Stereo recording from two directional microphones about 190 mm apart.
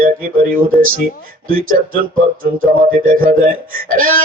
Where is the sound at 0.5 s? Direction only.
45° right (ahead or behind).